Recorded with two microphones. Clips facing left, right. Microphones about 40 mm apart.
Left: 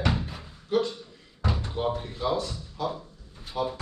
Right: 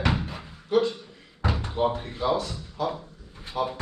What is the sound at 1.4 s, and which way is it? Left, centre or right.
Slam, right.